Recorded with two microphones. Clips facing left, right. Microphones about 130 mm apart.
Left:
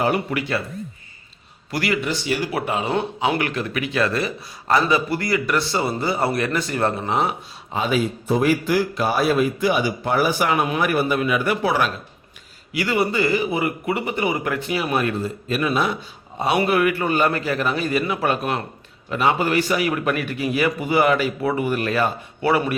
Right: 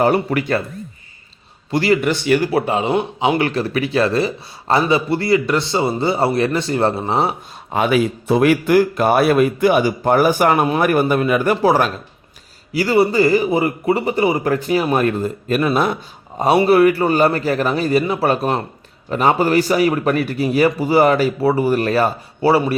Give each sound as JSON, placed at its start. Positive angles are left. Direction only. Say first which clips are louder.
{"t": 0.0, "sound": "a man's voice", "louder": "right 5 dB", "side_deg": -45}
{"t": 1.7, "sound": "a man's voice", "louder": "right 7 dB", "side_deg": -30}
{"t": 2.0, "sound": "speech", "louder": "right 7 dB", "side_deg": -60}
{"t": 2.5, "sound": "a man's voice", "louder": "right 5 dB", "side_deg": -30}
{"t": 7.7, "sound": "a man's voice", "louder": "right 5 dB", "side_deg": -65}